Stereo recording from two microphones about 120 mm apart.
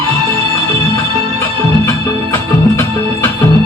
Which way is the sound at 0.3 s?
25° left (ahead or behind).